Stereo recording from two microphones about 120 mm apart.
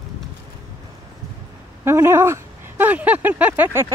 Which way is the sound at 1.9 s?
20° right (ahead or behind).